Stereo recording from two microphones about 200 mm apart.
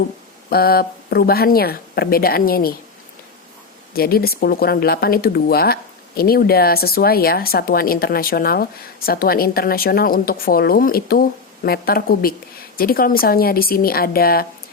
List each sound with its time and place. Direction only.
0.5 s speech: 50° left (ahead or behind)
3.9 s speech: 50° left (ahead or behind)